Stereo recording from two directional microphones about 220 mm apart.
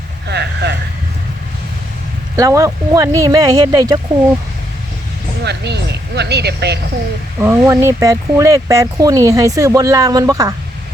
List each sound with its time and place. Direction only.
0.3 s vehicle: 50° right (ahead or behind)
2.3 s speech: 15° right (ahead or behind)
5.4 s speech: 50° right (ahead or behind)
7.4 s speech: 10° right (ahead or behind)